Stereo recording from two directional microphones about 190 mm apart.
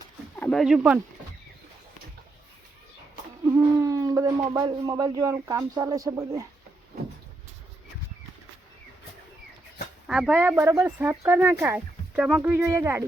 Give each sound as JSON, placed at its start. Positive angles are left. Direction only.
{"t": 0.3, "sound": "speech", "side_deg": 5}
{"t": 3.4, "sound": "speech", "side_deg": -15}
{"t": 10.1, "sound": "speech", "side_deg": -5}